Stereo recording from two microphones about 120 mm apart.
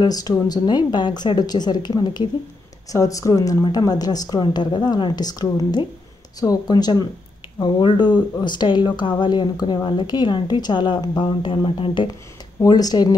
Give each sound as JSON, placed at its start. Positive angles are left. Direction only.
{"t": 0.0, "sound": "a woman's voice", "side_deg": 30}
{"t": 12.1, "sound": "speech", "side_deg": 30}